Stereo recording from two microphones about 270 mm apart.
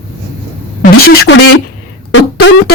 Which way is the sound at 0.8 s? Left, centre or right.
Left.